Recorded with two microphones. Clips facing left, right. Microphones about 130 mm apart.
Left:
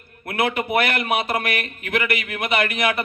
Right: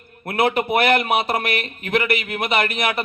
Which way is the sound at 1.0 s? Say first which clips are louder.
Right 2 dB; 30° right (ahead or behind).